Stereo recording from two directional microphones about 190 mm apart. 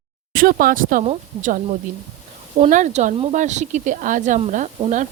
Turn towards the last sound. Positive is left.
turn(degrees=-40)  # may be behind; listen again after turning